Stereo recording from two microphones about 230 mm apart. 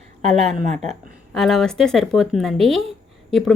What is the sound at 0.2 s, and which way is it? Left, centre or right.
Speech, right.